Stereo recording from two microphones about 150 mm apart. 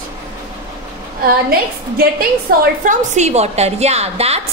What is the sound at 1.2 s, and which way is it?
A woman's voice, 80° right.